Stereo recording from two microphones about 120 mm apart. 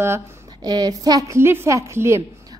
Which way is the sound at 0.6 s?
35° right (ahead or behind).